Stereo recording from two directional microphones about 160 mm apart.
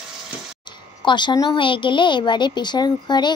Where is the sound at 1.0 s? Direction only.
30° left (ahead or behind).